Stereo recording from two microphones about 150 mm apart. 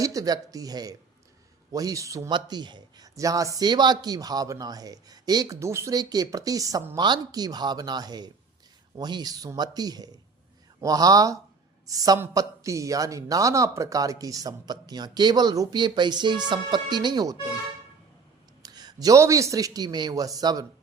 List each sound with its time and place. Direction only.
0.0 s speech: 25° right (ahead or behind)
18.6 s speech: 25° right (ahead or behind)